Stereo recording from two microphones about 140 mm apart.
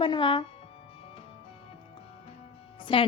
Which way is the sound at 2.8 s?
40° left (ahead or behind).